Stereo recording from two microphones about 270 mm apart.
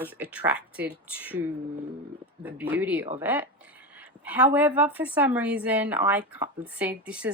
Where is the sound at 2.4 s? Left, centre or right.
Centre.